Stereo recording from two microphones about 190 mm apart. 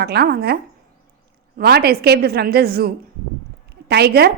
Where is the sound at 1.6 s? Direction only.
55° right (ahead or behind).